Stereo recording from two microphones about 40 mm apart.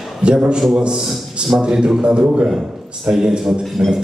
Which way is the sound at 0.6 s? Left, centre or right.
Centre.